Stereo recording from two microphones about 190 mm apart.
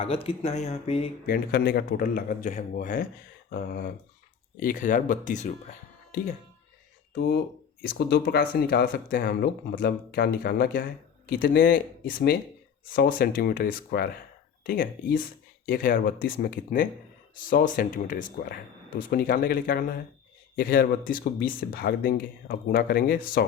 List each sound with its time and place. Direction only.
0.0 s speech: 30° left (ahead or behind)
1.3 s speech: 55° left (ahead or behind)
7.2 s speech: 60° left (ahead or behind)